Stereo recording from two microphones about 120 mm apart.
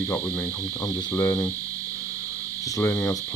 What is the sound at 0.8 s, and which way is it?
Cricket, 25° left (ahead or behind).